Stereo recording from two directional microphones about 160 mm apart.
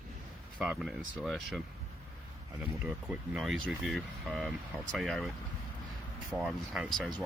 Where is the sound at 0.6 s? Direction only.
5° right (ahead or behind).